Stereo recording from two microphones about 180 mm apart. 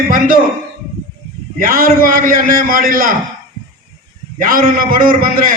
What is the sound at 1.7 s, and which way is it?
A man's voice, 50° right (ahead or behind).